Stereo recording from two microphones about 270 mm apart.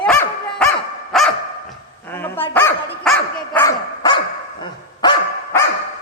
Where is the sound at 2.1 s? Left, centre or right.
Centre.